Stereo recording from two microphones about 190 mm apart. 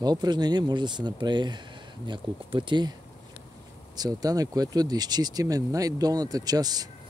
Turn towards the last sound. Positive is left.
turn(degrees=-20)  # may be behind; listen again after turning